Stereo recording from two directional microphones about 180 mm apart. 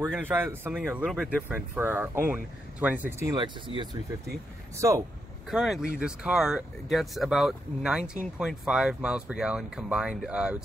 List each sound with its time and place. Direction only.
0.2 s speech: 10° right (ahead or behind)
1.8 s speech: 10° right (ahead or behind)
3.3 s speech: 25° right (ahead or behind)
5.5 s speech: centre (ahead or behind)